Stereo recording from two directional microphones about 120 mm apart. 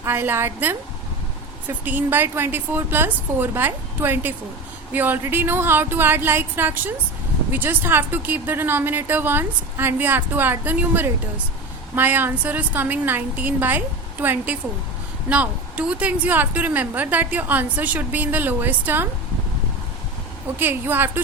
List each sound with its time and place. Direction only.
0.0 s a woman's voice: 20° right (ahead or behind)
20.6 s a woman's voice: 15° right (ahead or behind)